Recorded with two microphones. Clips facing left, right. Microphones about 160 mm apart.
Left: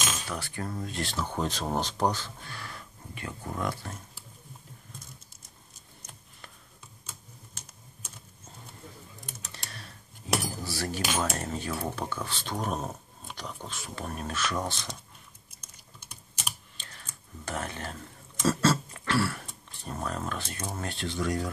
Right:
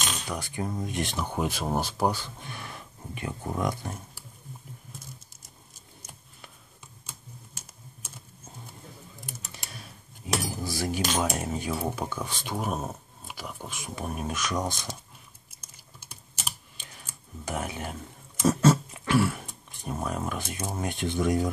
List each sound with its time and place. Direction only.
0.3 s speech: 15° right (ahead or behind)
7.1 s typing: 5° right (ahead or behind)
9.5 s a sound: 10° right (ahead or behind)
10.5 s speech: 15° right (ahead or behind)
16.7 s a sound: 10° right (ahead or behind)
20.6 s speech: 15° right (ahead or behind)